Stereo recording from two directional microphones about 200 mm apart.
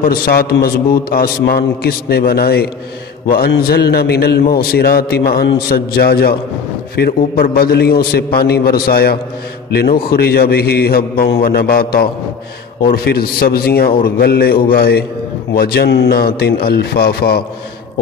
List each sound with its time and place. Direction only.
0.0 s a man's voice: 50° left (ahead or behind)